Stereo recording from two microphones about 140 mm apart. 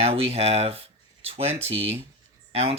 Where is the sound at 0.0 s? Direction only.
45° right (ahead or behind).